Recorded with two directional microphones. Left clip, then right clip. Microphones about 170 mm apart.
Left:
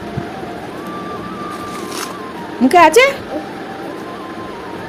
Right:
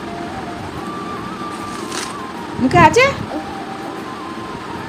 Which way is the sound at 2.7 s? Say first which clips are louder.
Left 2 dB; 35° left (ahead or behind).